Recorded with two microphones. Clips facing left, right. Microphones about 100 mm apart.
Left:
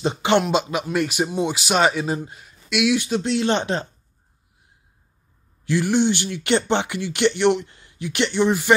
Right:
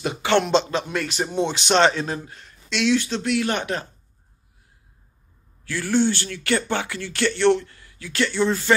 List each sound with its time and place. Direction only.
0.0 s speech: 25° left (ahead or behind)
0.4 s speech: 10° left (ahead or behind)
3.3 s speech: 25° left (ahead or behind)
5.7 s speech: 20° left (ahead or behind)